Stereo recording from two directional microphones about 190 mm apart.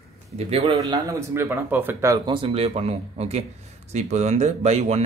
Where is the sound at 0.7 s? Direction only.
20° right (ahead or behind); by 5.0 s 35° right (ahead or behind).